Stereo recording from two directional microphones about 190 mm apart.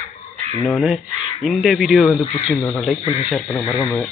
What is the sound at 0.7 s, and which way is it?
Speech, centre (ahead or behind).